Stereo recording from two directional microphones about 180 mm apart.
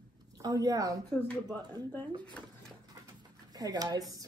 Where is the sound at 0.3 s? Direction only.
20° right (ahead or behind).